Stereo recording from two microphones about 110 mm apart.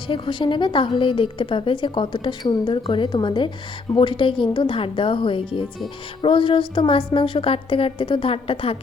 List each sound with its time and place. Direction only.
0.1 s a woman's voice: 50° left (ahead or behind)